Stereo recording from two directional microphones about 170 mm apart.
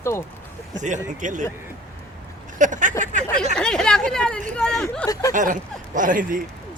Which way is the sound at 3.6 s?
5° left (ahead or behind).